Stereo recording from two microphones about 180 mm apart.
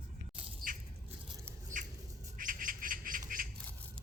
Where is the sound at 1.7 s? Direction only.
50° right (ahead or behind).